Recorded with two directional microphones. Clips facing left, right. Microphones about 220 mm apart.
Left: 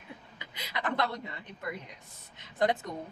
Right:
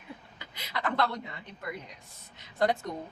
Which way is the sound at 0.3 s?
15° left (ahead or behind).